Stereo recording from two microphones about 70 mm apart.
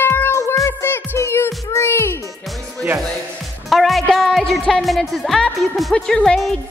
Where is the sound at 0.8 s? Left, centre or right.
Left.